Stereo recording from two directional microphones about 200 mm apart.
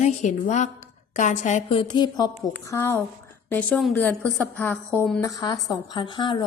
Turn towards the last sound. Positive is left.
turn(degrees=25)  # may be behind; listen again after turning